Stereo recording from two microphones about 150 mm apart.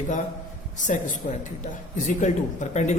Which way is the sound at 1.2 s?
55° left (ahead or behind).